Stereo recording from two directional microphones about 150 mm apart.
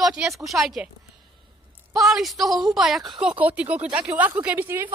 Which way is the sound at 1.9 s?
Centre (ahead or behind).